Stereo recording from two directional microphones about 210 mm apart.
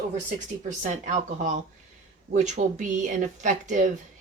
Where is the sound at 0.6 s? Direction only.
35° right (ahead or behind).